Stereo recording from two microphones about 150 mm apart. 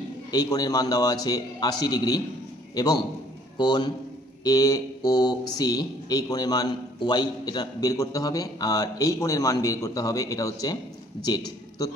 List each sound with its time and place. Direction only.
0.3 s a man's voice: 25° left (ahead or behind)